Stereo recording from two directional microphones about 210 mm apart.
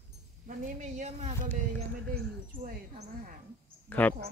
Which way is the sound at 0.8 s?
35° right (ahead or behind).